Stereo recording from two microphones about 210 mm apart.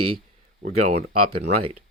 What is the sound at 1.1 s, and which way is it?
Speech, 90° right.